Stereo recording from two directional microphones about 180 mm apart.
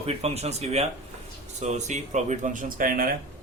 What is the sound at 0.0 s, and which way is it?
Speech, 35° right (ahead or behind).